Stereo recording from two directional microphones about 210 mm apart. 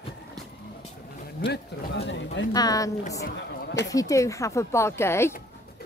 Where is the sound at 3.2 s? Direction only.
55° left (ahead or behind).